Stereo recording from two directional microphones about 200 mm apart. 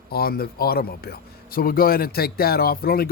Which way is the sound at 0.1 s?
50° left (ahead or behind).